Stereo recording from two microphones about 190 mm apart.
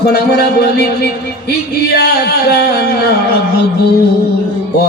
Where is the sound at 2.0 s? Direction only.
60° left (ahead or behind).